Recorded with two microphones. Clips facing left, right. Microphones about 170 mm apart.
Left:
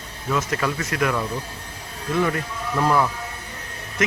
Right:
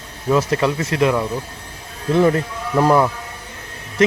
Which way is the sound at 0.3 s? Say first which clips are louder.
Right 7 dB; 25° right (ahead or behind).